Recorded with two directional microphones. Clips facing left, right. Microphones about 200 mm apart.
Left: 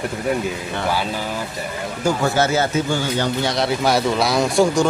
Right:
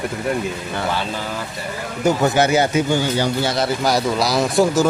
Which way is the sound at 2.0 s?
15° right (ahead or behind).